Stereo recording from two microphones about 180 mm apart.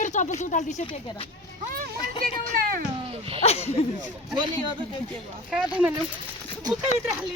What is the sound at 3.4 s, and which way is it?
Speech, 35° left (ahead or behind).